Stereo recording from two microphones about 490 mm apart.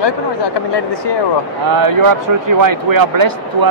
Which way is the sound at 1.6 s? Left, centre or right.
Right.